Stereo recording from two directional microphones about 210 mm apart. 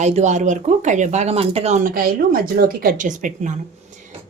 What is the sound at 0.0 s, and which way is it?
Speech, 35° right (ahead or behind).